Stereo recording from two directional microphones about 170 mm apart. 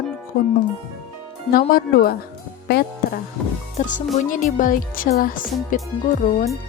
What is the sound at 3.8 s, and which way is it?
Speech, 45° left (ahead or behind).